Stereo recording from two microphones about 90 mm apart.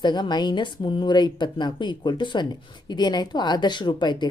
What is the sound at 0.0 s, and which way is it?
Speech, 55° left (ahead or behind).